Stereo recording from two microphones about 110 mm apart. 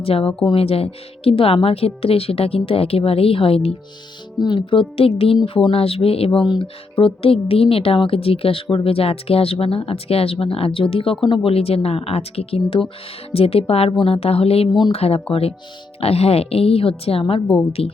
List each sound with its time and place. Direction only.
0.0 s speech: 60° left (ahead or behind)
4.4 s speech: 45° left (ahead or behind)
4.9 s speech: 60° left (ahead or behind)
17.4 s a woman's voice: 15° left (ahead or behind)
17.7 s speech: 65° left (ahead or behind)